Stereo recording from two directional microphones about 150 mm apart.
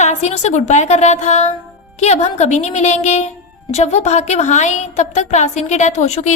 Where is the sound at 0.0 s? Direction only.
50° left (ahead or behind).